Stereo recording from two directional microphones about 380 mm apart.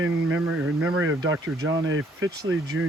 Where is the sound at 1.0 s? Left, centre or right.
Right.